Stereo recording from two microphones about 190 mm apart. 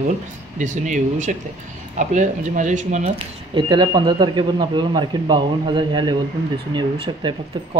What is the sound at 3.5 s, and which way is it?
Speech, 25° right (ahead or behind).